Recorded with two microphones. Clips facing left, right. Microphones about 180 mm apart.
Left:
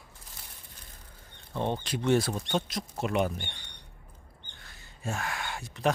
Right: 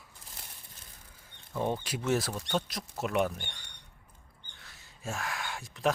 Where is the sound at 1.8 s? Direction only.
5° right (ahead or behind).